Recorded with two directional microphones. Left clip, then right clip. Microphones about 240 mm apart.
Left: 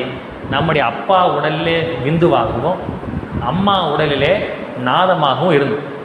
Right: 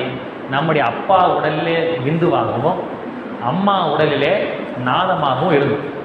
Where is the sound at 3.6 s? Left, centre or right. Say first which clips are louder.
Left 1 dB; left.